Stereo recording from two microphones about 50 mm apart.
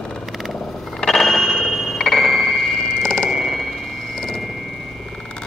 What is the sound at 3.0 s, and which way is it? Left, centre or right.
Frog, centre.